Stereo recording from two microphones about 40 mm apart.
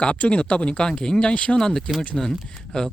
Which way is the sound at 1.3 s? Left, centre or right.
Left.